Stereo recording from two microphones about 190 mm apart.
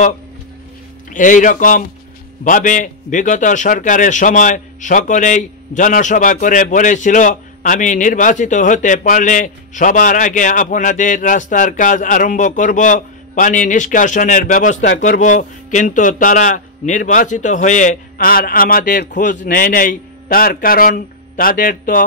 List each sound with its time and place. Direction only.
1.1 s a man's voice: 45° left (ahead or behind)